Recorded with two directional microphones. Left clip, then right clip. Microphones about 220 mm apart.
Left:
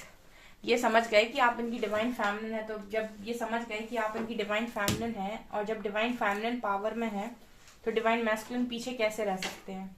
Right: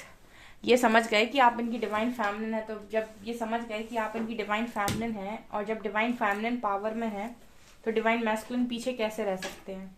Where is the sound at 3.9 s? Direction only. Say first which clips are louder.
Even; 45° right (ahead or behind).